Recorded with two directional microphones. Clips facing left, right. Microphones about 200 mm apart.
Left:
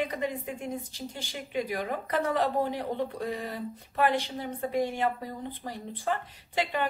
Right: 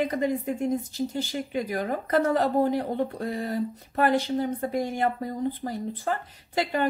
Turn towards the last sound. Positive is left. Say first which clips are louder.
# right 3 dB
turn(degrees=-45)  # may be behind; listen again after turning